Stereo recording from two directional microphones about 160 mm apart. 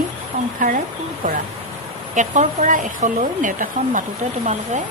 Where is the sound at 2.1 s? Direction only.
50° right (ahead or behind).